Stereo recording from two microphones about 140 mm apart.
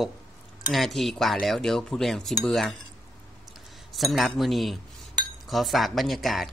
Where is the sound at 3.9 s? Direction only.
Centre (ahead or behind).